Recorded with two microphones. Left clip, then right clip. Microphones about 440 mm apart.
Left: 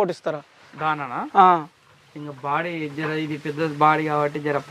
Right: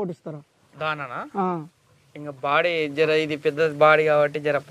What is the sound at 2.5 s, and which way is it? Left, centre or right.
Speech, right.